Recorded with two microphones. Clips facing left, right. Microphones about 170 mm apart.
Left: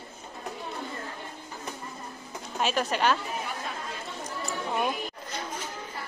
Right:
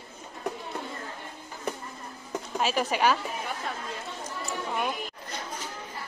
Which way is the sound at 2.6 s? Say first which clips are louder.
Even; 5° right (ahead or behind).